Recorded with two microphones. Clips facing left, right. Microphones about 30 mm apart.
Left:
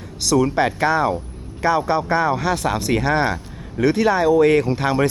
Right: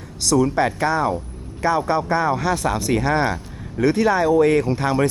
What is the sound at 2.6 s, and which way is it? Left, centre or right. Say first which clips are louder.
Speech: even; left.